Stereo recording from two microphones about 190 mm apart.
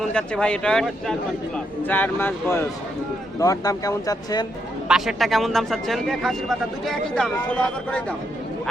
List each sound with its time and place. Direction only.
0.1 s speech: 5° left (ahead or behind)
4.9 s speech: centre (ahead or behind)